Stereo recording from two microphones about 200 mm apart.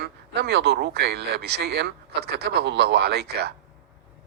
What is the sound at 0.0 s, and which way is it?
Speech, 55° right (ahead or behind).